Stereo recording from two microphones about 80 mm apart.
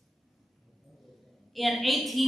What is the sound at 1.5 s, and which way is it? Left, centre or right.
Speech, centre.